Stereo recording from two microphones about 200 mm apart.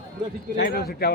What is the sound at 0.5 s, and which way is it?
Speech, 55° left (ahead or behind).